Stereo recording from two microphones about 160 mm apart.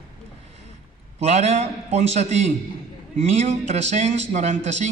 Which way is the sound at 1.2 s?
45° right (ahead or behind).